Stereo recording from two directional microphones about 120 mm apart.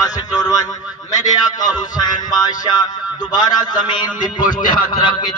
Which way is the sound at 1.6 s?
35° left (ahead or behind).